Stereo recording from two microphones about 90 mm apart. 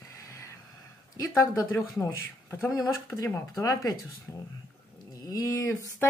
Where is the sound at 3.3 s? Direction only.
40° left (ahead or behind).